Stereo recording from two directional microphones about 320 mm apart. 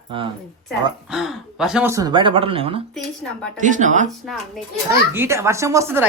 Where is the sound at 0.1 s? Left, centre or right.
Centre.